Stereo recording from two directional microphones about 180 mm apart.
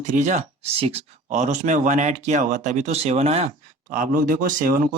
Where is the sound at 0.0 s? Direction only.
40° right (ahead or behind).